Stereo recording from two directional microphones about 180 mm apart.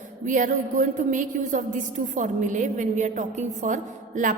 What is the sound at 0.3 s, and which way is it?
A woman's voice, 45° right (ahead or behind).